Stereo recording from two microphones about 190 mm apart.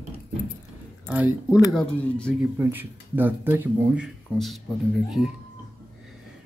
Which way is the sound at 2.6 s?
10° right (ahead or behind).